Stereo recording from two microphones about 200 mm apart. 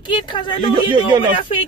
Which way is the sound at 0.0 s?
25° left (ahead or behind).